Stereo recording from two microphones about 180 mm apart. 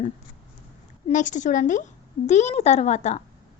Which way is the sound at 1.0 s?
45° left (ahead or behind).